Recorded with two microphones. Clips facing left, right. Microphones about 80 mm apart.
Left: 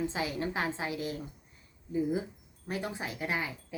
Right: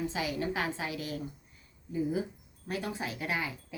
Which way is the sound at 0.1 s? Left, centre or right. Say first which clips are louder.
Even; left.